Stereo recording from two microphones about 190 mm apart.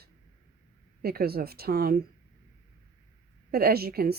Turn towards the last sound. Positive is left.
turn(degrees=-55)  # may be behind; listen again after turning